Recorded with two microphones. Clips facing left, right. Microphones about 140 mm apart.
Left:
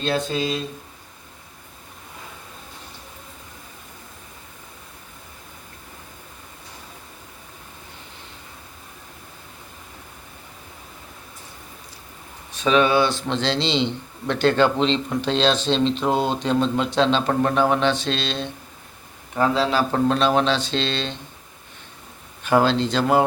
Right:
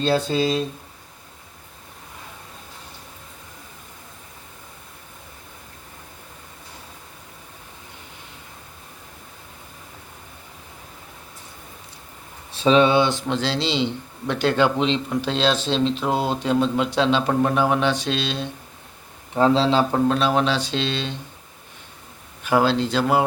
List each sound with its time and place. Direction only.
0.0 s speech: 30° right (ahead or behind)
12.5 s speech: 30° right (ahead or behind); by 18.5 s 10° right (ahead or behind)
19.3 s speech: 25° right (ahead or behind)
19.9 s speech: 5° right (ahead or behind)
22.4 s speech: 5° right (ahead or behind)